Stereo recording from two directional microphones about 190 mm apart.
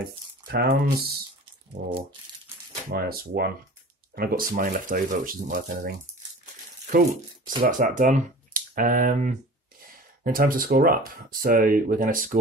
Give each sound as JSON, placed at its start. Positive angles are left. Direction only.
{"t": 0.5, "sound": "speech", "side_deg": -55}
{"t": 1.8, "sound": "speech", "side_deg": -45}